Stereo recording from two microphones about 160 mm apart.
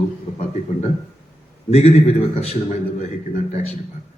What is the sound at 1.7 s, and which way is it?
A man's voice, 40° left (ahead or behind).